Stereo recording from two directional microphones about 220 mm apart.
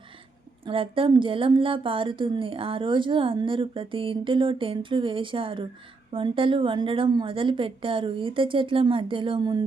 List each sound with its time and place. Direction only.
0.6 s a woman's voice: 25° right (ahead or behind)